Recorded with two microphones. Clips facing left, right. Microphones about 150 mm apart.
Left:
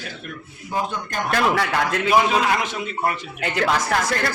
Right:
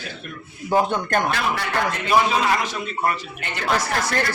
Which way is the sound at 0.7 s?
65° right (ahead or behind).